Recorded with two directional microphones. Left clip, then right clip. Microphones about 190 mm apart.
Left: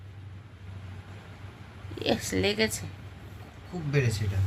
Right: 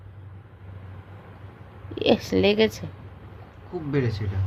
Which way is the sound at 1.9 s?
35° right (ahead or behind).